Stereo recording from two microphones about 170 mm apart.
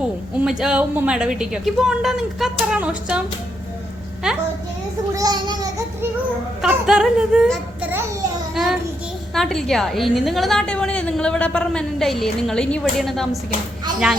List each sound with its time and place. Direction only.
0.3 s a woman's voice: 5° right (ahead or behind)
5.1 s a child's voice: 25° right (ahead or behind)
6.6 s a woman's voice: 5° right (ahead or behind)
8.5 s child singing: centre (ahead or behind)
9.3 s a woman's voice: 5° left (ahead or behind)